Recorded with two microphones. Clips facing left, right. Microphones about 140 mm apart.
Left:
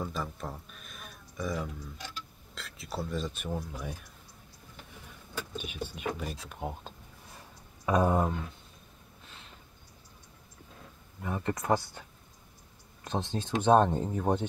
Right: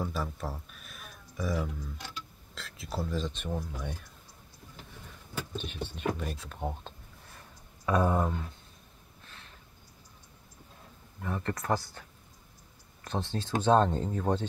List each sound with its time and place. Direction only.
0.0 s a sound: 5° right (ahead or behind)
2.5 s speech: centre (ahead or behind)
5.6 s speech: 10° left (ahead or behind)
11.2 s speech: 5° left (ahead or behind)
13.1 s speech: 15° left (ahead or behind)